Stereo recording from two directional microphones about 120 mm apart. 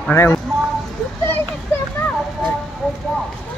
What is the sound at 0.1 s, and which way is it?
Speech, 15° left (ahead or behind).